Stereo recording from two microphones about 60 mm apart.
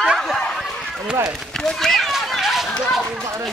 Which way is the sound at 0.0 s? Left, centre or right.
Centre.